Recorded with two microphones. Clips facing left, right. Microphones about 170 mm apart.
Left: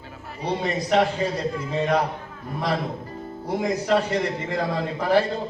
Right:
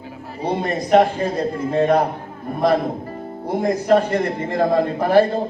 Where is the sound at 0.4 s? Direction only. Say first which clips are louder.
Right 3 dB; 50° right (ahead or behind).